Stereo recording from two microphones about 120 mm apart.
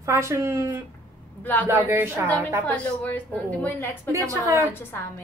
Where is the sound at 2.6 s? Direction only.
10° left (ahead or behind).